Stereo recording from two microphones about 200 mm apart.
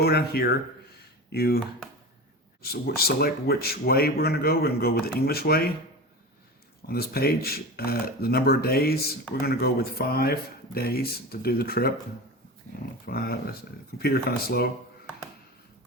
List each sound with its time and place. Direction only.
0.0 s speech: 50° left (ahead or behind)
6.8 s speech: 50° left (ahead or behind)
13.1 s speech: 50° left (ahead or behind)